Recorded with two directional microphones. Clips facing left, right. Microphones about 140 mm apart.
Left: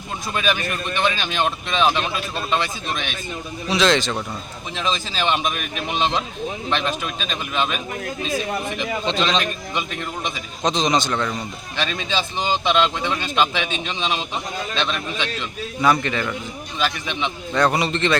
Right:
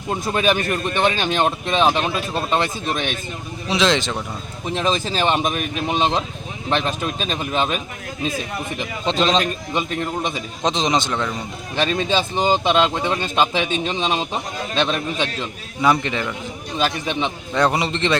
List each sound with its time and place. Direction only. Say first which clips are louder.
0.1 s speech: right 4 dB; 40° right (ahead or behind)
3.7 s a man's voice: even; 20° right (ahead or behind)
4.7 s speech: right 5 dB; 45° right (ahead or behind)
8.8 s speech: right 4 dB; 40° right (ahead or behind)
10.7 s a man's voice: even; 25° right (ahead or behind)
11.8 s speech: right 5 dB; 45° right (ahead or behind)
15.8 s a man's voice: right 1 dB; 20° right (ahead or behind)
16.7 s speech: right 3 dB; 40° right (ahead or behind)
17.6 s a man's voice: even; 25° right (ahead or behind)